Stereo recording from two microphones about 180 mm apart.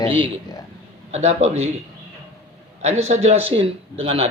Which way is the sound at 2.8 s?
40° right (ahead or behind).